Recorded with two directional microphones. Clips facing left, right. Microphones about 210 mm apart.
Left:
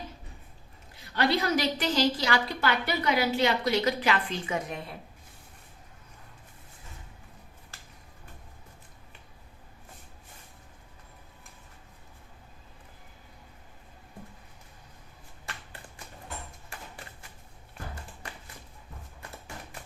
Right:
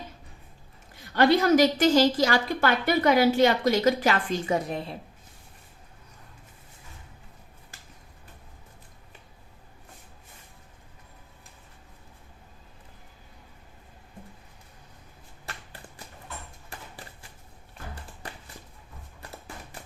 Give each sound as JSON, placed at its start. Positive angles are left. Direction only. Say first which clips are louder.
{"t": 1.1, "sound": "a woman's voice", "louder": "right 7 dB", "side_deg": -45}